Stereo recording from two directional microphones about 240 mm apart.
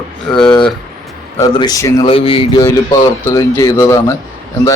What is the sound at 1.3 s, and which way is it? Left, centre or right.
A man's voice, centre.